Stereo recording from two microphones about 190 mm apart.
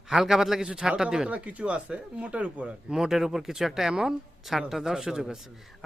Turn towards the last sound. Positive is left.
turn(degrees=-5)  # may be behind; listen again after turning